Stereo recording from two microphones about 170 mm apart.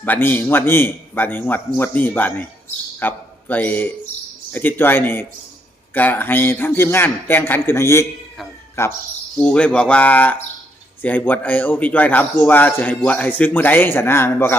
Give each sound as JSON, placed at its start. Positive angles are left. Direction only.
{"t": 0.0, "sound": "a man's voice", "side_deg": 10}